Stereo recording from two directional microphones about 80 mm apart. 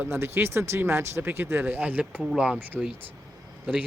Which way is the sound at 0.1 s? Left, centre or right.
Right.